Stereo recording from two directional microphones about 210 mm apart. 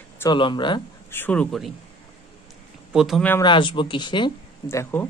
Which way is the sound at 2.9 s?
Centre (ahead or behind).